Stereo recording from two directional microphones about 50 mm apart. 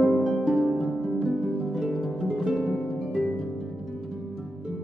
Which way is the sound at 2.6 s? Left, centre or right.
Left.